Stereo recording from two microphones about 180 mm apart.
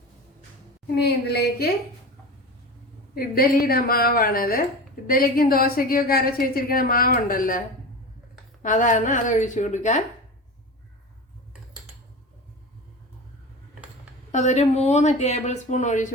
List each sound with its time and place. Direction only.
0.9 s a woman's voice: 65° left (ahead or behind)
3.2 s a woman's voice: 55° left (ahead or behind)
8.6 s a woman's voice: 45° left (ahead or behind)
14.3 s speech: 40° left (ahead or behind)